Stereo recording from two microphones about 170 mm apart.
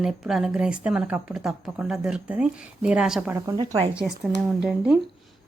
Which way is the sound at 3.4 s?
20° right (ahead or behind).